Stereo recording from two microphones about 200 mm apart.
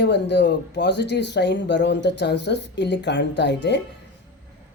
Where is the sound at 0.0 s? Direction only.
60° left (ahead or behind).